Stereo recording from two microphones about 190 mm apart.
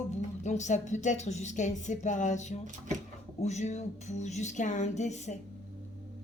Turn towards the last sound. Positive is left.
turn(degrees=35)  # may be behind; listen again after turning